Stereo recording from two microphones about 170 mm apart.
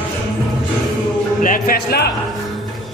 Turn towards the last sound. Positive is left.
turn(degrees=65)  # may be behind; listen again after turning